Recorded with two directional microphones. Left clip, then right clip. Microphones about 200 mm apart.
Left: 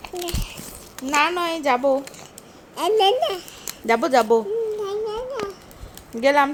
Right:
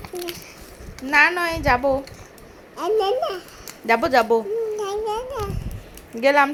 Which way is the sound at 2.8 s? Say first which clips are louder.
Left 3 dB; 25° left (ahead or behind).